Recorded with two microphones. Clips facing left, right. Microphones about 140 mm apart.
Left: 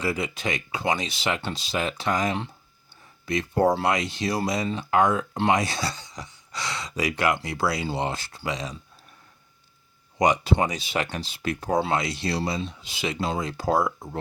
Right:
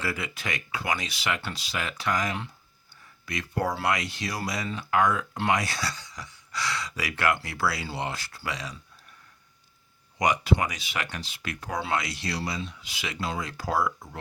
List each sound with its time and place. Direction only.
0.0 s speech: 20° left (ahead or behind)
10.2 s speech: 25° left (ahead or behind)